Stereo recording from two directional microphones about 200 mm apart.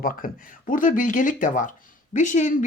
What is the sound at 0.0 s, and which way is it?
Speech, 45° left (ahead or behind).